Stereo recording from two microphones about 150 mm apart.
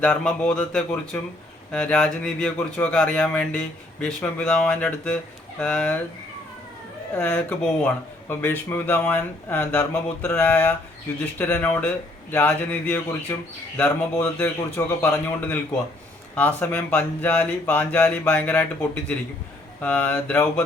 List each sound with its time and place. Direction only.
0.0 s speech: 10° left (ahead or behind)
7.1 s speech: 10° left (ahead or behind)